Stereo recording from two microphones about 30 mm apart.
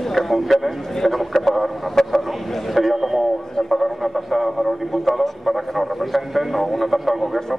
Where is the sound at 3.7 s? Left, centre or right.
Centre.